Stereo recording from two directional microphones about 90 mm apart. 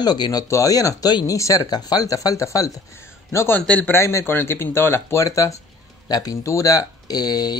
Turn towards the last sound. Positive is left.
turn(degrees=50)  # may be behind; listen again after turning